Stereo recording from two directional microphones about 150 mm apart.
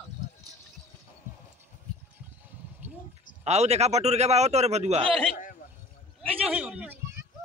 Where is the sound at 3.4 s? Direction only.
45° right (ahead or behind).